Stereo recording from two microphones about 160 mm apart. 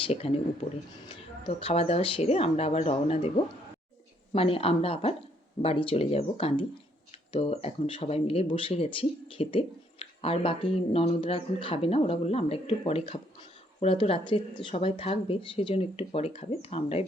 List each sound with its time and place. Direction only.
0.1 s speech: 40° left (ahead or behind)